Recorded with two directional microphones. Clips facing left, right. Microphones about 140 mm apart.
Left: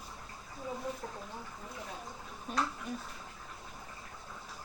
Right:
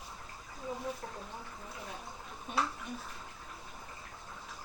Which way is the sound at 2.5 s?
Centre (ahead or behind).